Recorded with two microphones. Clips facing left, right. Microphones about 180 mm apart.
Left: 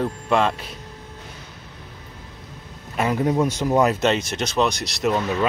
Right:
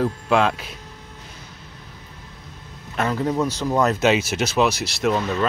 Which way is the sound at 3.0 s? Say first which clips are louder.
Left 2 dB; 15° left (ahead or behind).